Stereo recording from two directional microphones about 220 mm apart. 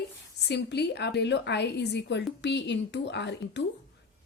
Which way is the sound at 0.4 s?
50° left (ahead or behind).